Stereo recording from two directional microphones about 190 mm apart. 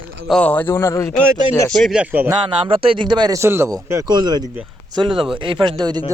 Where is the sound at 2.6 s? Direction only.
30° right (ahead or behind).